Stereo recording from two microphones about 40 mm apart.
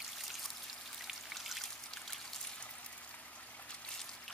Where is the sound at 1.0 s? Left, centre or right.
Centre.